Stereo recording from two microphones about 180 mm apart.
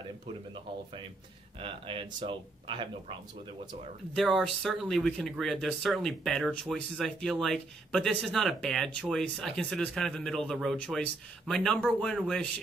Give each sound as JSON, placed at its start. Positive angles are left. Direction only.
{"t": 1.6, "sound": "speech", "side_deg": -30}
{"t": 4.1, "sound": "speech", "side_deg": 0}